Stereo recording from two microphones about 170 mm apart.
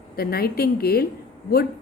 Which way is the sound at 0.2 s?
65° left (ahead or behind).